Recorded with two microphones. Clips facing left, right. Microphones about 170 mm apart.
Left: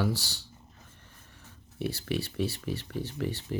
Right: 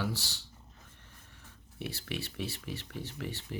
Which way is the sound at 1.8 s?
40° left (ahead or behind).